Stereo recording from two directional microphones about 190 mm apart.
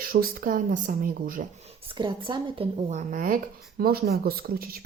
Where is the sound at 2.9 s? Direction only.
45° right (ahead or behind).